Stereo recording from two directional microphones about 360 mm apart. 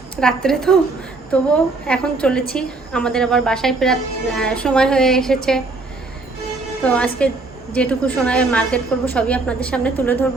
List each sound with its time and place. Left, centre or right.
0.2 s a woman's voice: centre
6.8 s a woman's voice: centre